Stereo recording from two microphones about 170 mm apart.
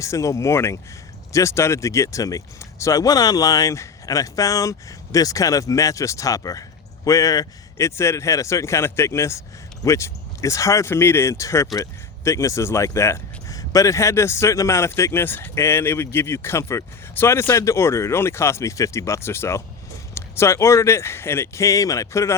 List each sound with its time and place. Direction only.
0.0 s speech: 20° left (ahead or behind)